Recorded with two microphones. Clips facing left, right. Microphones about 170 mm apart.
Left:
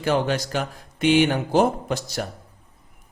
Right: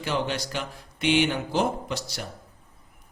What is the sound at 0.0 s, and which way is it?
Speech, 45° left (ahead or behind).